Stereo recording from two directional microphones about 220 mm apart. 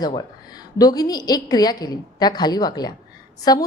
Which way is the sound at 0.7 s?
15° left (ahead or behind).